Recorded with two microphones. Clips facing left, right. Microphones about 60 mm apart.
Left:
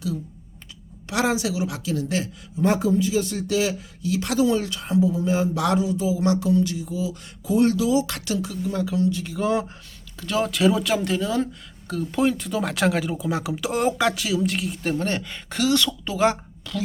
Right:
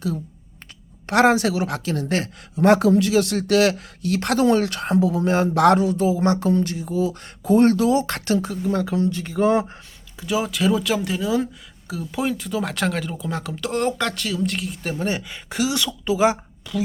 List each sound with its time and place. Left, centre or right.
1.0 s speech: right
10.2 s speech: centre